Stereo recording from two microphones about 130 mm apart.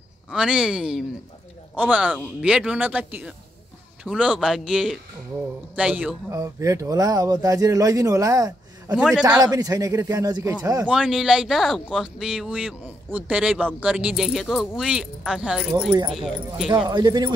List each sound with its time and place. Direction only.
0.3 s a man's voice: 5° right (ahead or behind)
6.3 s speech: 25° right (ahead or behind)
8.9 s speech: 5° right (ahead or behind)
9.4 s speech: 25° right (ahead or behind)
10.9 s a man's voice: 5° right (ahead or behind)
16.7 s speech: 35° right (ahead or behind)